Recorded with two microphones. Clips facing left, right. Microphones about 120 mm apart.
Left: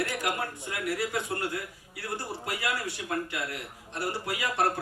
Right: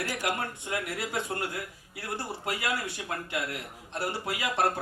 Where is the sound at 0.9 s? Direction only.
25° right (ahead or behind).